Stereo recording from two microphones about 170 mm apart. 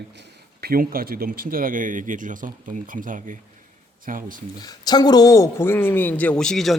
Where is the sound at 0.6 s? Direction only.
60° right (ahead or behind).